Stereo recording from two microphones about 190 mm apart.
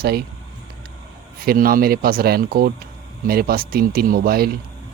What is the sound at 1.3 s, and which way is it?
Speech, 50° right (ahead or behind).